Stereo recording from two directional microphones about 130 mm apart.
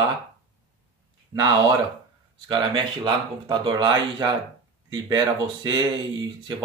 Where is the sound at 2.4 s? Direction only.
35° right (ahead or behind).